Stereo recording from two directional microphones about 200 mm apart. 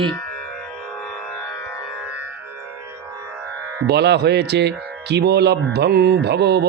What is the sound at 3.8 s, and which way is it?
Speech, 55° right (ahead or behind).